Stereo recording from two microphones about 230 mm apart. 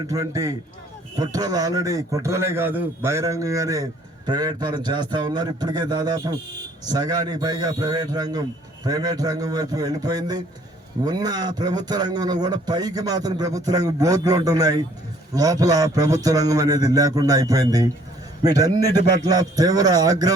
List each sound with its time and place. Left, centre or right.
0.1 s a man's voice: centre